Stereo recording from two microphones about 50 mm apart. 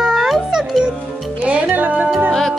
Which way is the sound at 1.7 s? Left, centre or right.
Right.